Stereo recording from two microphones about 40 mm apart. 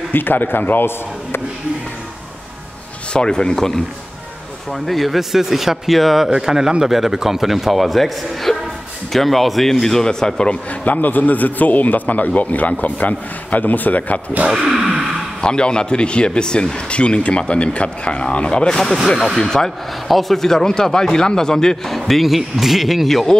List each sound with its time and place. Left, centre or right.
0.1 s a man's voice: left
3.1 s speech: left
3.5 s speech: centre
6.3 s speech: centre
10.5 s a man's voice: left
14.5 s gasp: centre
15.4 s speech: left
20.1 s speech: centre
21.9 s speech: centre